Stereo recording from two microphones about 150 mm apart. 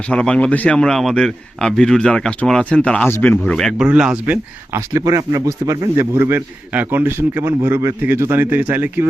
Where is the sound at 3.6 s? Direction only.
Centre (ahead or behind).